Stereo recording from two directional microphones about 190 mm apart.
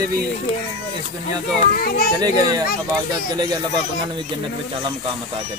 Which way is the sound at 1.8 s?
50° left (ahead or behind).